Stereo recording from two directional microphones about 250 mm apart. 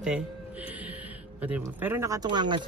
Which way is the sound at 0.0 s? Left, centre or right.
Centre.